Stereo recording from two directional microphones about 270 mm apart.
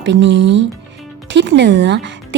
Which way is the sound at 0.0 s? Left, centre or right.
Right.